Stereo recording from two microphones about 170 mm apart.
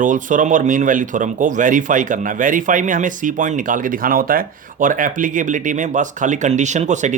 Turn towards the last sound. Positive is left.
turn(degrees=-45)  # may be behind; listen again after turning